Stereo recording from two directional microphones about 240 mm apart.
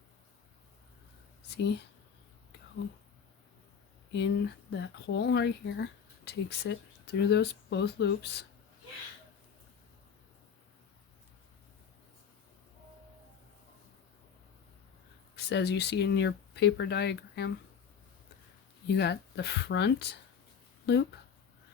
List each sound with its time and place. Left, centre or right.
1.5 s speech: left
4.1 s speech: left
15.4 s speech: left
18.9 s speech: left